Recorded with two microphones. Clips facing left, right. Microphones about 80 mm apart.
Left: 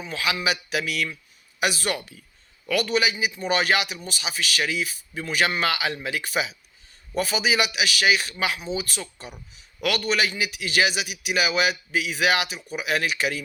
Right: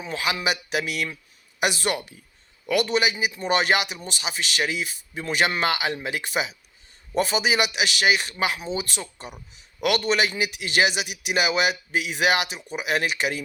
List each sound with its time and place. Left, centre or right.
0.4 s a man's voice: right